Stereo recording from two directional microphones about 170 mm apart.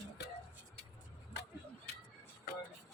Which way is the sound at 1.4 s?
85° left.